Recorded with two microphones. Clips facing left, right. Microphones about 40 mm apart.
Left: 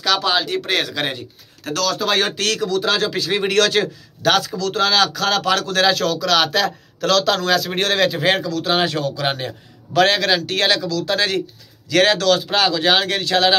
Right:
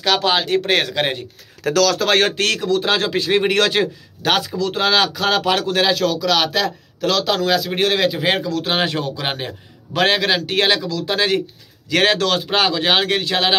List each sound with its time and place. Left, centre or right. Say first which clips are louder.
0.0 s speech: right 1 dB; right
2.0 s a man's voice: right 3 dB; right
5.9 s speech: even; centre
8.5 s a man's voice: left 1 dB; right